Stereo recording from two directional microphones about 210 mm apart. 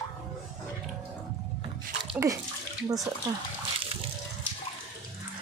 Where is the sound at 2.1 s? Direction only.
15° right (ahead or behind).